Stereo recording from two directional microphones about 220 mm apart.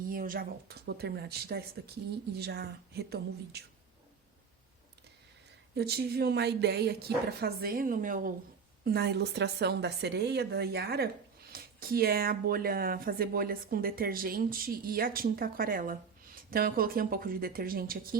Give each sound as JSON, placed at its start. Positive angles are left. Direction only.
{"t": 0.0, "sound": "a woman's voice", "side_deg": -40}
{"t": 5.7, "sound": "a woman's voice", "side_deg": -45}